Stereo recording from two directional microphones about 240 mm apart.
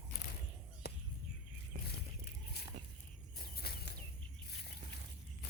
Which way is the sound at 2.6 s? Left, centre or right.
Left.